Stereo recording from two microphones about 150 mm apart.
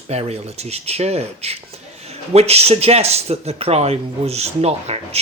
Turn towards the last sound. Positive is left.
turn(degrees=-45)  # may be behind; listen again after turning